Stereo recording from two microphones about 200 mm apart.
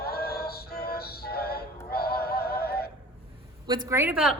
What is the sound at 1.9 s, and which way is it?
Synthetic singing, 50° left (ahead or behind).